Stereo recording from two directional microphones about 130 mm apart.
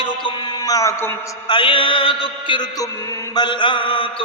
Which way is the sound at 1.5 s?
40° left (ahead or behind).